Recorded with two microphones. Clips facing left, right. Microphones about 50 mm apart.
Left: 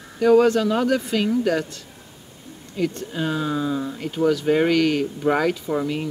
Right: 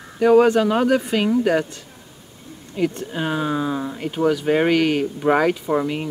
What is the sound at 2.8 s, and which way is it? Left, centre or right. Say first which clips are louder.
Speech: right 2 dB; right.